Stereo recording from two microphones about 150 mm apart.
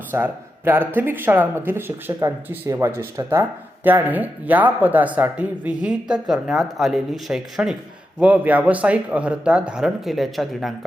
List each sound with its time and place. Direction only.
0.1 s speech: 15° right (ahead or behind)